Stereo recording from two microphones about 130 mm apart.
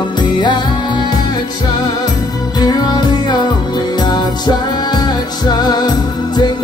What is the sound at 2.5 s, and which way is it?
Music, 30° left (ahead or behind).